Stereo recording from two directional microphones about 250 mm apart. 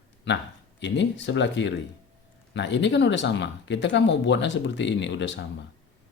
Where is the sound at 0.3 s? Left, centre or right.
Left.